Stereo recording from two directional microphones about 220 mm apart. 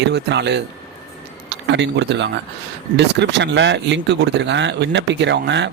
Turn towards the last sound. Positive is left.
turn(degrees=-55)  # may be behind; listen again after turning